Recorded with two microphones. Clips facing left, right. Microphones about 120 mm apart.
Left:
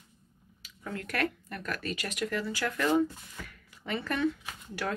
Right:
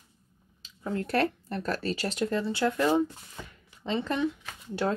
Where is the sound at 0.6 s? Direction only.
30° right (ahead or behind).